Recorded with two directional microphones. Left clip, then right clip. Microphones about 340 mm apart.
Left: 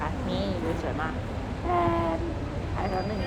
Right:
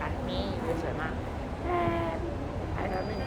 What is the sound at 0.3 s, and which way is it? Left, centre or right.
Vehicle, centre.